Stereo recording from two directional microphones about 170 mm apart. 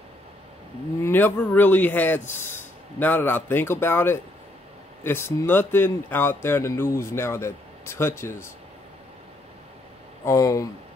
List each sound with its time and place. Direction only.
1.0 s speech: 10° left (ahead or behind)
10.2 s speech: 20° left (ahead or behind)